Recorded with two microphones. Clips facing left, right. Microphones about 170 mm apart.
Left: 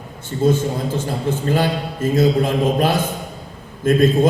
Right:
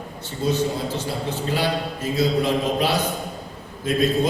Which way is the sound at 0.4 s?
50° left (ahead or behind).